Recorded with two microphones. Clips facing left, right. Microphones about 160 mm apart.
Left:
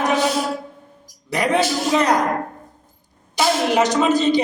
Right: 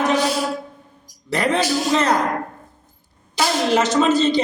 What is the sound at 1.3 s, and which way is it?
Speech, 15° left (ahead or behind).